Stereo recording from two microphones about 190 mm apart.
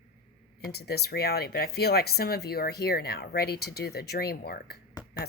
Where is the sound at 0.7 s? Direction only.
55° left (ahead or behind).